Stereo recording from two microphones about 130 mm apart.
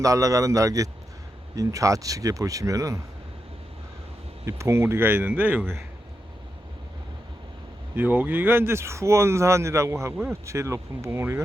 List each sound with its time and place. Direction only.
0.0 s speech: 25° right (ahead or behind)
4.4 s speech: 20° right (ahead or behind)
7.9 s speech: 15° right (ahead or behind)